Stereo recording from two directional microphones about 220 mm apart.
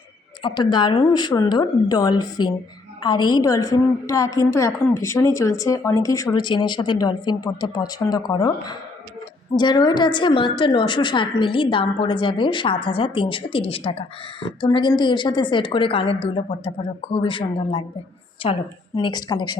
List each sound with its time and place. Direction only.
0.4 s a woman's voice: 20° left (ahead or behind)